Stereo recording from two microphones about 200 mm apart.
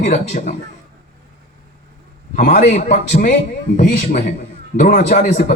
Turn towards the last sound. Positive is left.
turn(degrees=45)  # may be behind; listen again after turning